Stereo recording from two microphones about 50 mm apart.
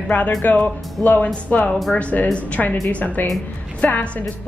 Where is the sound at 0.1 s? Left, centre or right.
Left.